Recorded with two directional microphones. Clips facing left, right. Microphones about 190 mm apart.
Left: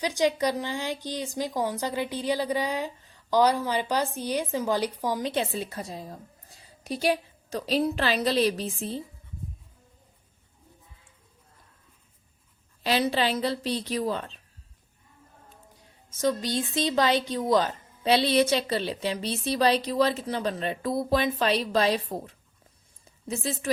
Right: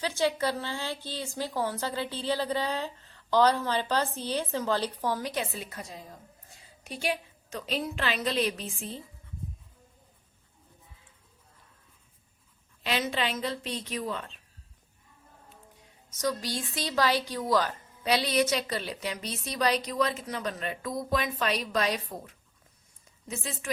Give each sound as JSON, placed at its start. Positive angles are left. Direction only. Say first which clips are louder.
{"t": 0.0, "sound": "speech", "louder": "left 3 dB", "side_deg": 15}
{"t": 5.3, "sound": "a woman's voice", "louder": "left 5 dB", "side_deg": 30}
{"t": 12.8, "sound": "a woman's voice", "louder": "left 5 dB", "side_deg": 35}
{"t": 16.0, "sound": "a woman's voice", "louder": "left 5 dB", "side_deg": 25}
{"t": 23.0, "sound": "a sound", "louder": "left 6 dB", "side_deg": 35}